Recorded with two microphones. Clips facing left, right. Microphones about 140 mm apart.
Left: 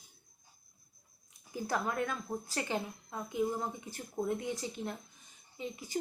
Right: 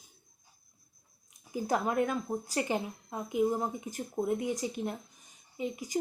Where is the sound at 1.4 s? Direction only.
15° right (ahead or behind).